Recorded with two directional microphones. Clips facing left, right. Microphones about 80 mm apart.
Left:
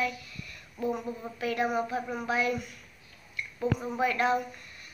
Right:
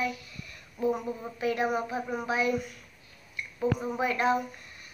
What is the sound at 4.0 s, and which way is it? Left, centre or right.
Speech, right.